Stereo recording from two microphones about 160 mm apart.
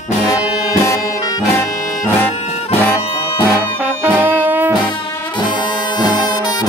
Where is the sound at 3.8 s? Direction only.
10° right (ahead or behind).